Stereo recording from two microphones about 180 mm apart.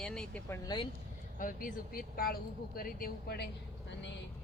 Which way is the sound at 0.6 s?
25° left (ahead or behind).